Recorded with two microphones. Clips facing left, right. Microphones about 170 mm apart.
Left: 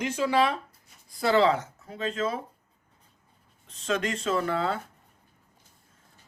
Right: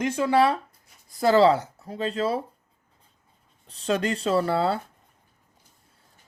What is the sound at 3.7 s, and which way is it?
Speech, 35° right (ahead or behind).